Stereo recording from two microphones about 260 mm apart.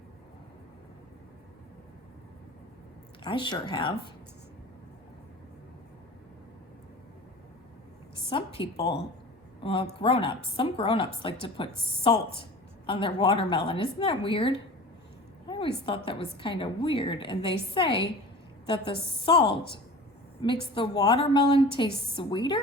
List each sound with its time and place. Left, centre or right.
3.2 s a woman's voice: centre
8.3 s a woman's voice: centre
15.4 s a sound: centre
16.0 s a woman's voice: centre
18.6 s a woman's voice: centre